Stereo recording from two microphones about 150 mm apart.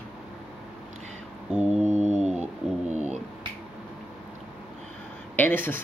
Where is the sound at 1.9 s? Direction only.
45° right (ahead or behind).